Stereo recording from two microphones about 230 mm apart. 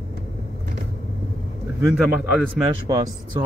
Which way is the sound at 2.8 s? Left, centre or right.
Centre.